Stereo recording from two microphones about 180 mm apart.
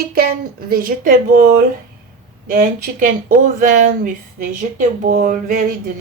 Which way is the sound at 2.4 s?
45° right (ahead or behind).